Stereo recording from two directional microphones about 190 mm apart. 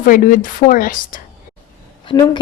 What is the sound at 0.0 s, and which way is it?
A woman's voice, 45° left (ahead or behind).